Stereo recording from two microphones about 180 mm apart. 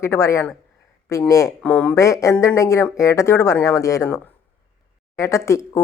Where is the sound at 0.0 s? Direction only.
15° left (ahead or behind).